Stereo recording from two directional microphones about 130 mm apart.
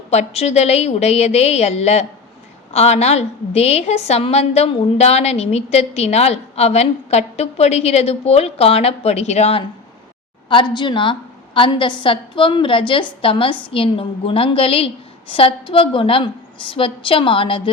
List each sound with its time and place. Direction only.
0.1 s a woman's voice: 55° left (ahead or behind)
10.5 s a woman's voice: 40° left (ahead or behind)